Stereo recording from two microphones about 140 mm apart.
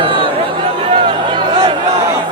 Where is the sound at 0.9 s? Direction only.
40° right (ahead or behind).